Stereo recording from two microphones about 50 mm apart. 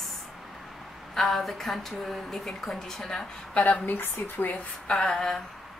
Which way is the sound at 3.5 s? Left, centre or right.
Left.